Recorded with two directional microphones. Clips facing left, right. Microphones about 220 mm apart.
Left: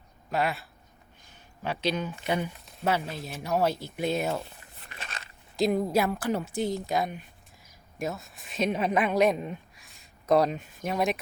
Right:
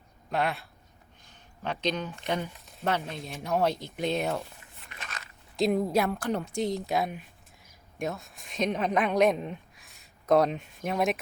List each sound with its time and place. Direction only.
0.3 s speech: centre (ahead or behind)
4.9 s biting: 30° left (ahead or behind)
5.5 s a woman's voice: centre (ahead or behind)